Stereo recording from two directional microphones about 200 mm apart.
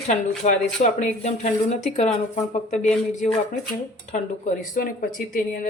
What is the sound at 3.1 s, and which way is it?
Speech, 35° left (ahead or behind).